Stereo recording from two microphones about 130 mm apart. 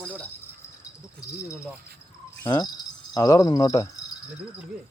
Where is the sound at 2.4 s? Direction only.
30° left (ahead or behind).